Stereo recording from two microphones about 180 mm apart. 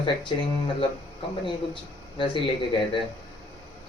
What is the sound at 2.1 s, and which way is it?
Speech, 30° left (ahead or behind).